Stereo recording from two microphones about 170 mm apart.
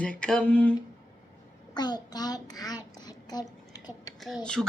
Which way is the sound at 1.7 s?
25° left (ahead or behind).